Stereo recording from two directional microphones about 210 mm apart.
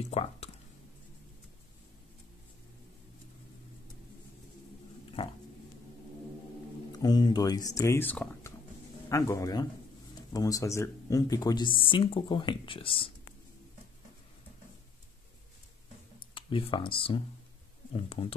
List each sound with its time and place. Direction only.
0.0 s a sound: 30° left (ahead or behind)
5.2 s speech: 25° left (ahead or behind)
6.9 s speech: 20° left (ahead or behind)
16.3 s speech: 25° left (ahead or behind)